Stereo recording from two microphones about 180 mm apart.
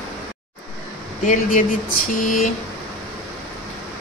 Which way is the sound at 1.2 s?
45° left (ahead or behind).